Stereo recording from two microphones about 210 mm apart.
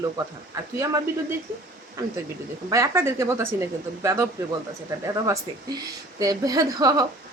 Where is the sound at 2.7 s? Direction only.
10° right (ahead or behind).